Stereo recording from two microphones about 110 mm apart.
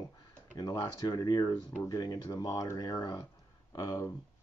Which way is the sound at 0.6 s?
35° left (ahead or behind).